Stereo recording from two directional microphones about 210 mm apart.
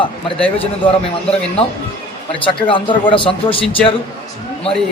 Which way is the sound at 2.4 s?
25° left (ahead or behind).